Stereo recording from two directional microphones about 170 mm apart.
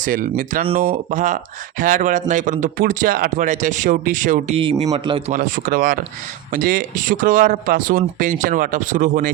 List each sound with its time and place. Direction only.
0.0 s speech: 55° right (ahead or behind)
4.5 s a man's voice: 35° right (ahead or behind)
5.3 s speech: 55° right (ahead or behind)